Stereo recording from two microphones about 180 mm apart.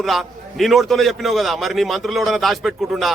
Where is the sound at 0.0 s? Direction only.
Centre (ahead or behind).